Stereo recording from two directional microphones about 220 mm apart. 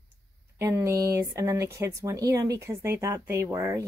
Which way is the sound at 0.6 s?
15° right (ahead or behind).